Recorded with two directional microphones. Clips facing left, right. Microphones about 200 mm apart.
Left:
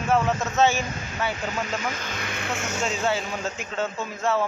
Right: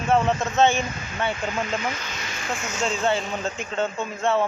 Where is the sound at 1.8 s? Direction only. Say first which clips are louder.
Even; 45° left (ahead or behind).